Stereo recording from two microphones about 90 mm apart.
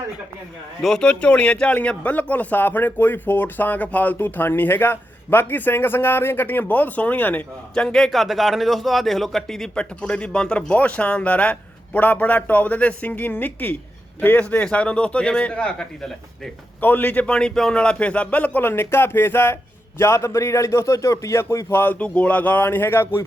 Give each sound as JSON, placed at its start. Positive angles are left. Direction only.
{"t": 0.8, "sound": "speech", "side_deg": 5}
{"t": 16.8, "sound": "a man's voice", "side_deg": 20}